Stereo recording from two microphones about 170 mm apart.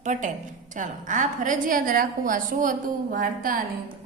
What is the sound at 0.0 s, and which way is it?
A woman's voice, 45° right (ahead or behind).